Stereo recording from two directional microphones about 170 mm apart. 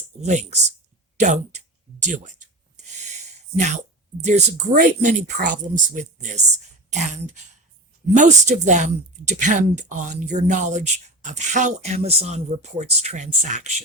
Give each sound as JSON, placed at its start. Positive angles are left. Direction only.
{"t": 0.2, "sound": "speech", "side_deg": -40}
{"t": 1.1, "sound": "rub", "side_deg": -45}
{"t": 4.3, "sound": "speech", "side_deg": -45}